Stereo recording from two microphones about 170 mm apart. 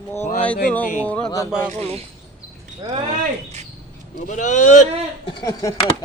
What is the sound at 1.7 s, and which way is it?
Speech, 35° right (ahead or behind).